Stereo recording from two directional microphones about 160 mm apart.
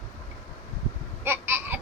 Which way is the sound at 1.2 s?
15° right (ahead or behind).